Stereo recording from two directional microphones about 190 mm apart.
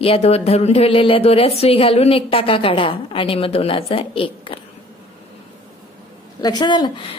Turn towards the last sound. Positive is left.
turn(degrees=25)  # may be behind; listen again after turning